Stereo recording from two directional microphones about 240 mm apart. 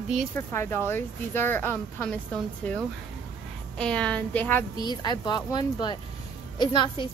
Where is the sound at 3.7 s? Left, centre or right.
Centre.